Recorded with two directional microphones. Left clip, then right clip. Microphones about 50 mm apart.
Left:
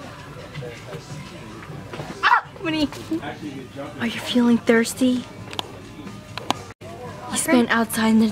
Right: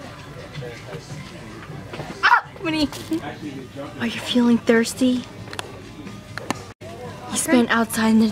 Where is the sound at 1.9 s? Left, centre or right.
Centre.